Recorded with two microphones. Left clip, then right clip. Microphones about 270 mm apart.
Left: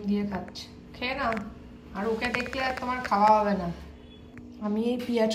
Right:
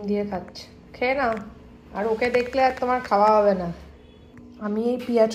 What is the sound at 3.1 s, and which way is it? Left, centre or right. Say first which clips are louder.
Speech: right 3 dB; centre.